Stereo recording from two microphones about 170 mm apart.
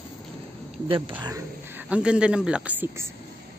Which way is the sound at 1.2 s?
20° right (ahead or behind).